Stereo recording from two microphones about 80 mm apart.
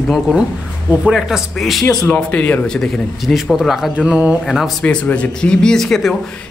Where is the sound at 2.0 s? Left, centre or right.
Centre.